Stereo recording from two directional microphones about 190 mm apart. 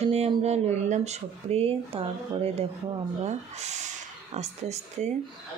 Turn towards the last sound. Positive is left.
turn(degrees=-35)  # may be behind; listen again after turning